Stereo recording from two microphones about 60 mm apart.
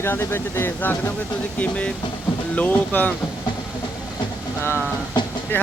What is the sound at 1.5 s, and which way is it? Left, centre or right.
Speech, left.